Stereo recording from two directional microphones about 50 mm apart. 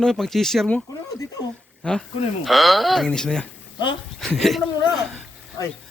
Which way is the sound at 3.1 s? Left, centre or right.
Centre.